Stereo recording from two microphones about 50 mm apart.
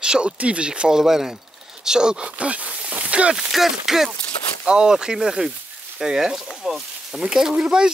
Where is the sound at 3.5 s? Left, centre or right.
Centre.